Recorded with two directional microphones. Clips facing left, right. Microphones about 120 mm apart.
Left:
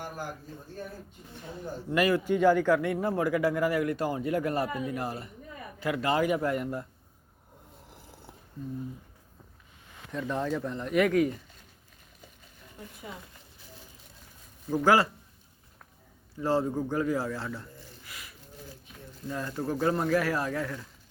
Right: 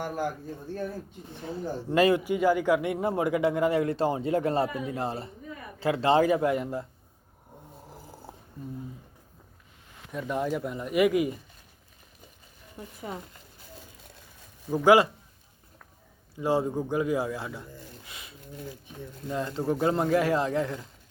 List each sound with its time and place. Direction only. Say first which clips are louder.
1.5 s speech: right 4 dB; 30° right (ahead or behind)
2.2 s speech: left 1 dB; 10° right (ahead or behind)
7.9 s snoring: right 5 dB; 40° right (ahead or behind)
10.1 s speech: right 1 dB; 10° right (ahead or behind)
13.0 s speech: right 7 dB; 40° right (ahead or behind)
14.8 s speech: right 4 dB; 15° right (ahead or behind)
16.3 s speech: right 1 dB; 15° right (ahead or behind)